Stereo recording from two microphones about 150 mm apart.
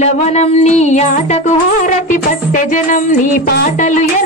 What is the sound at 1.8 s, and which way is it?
Music, 65° left (ahead or behind).